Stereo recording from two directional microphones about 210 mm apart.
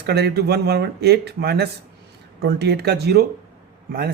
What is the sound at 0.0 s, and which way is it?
Speech, 50° right (ahead or behind).